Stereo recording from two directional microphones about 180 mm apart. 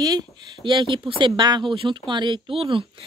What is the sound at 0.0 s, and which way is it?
Speech, 25° right (ahead or behind).